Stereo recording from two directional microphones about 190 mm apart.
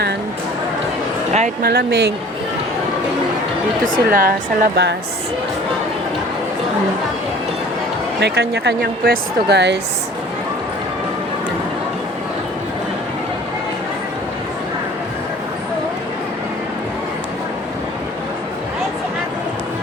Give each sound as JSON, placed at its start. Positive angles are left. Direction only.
{"t": 1.6, "sound": "speech", "side_deg": -55}
{"t": 3.8, "sound": "speech", "side_deg": -45}
{"t": 8.2, "sound": "speech", "side_deg": -60}